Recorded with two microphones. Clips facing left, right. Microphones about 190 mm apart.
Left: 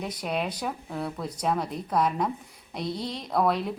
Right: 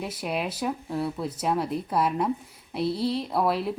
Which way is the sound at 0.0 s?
5° right (ahead or behind).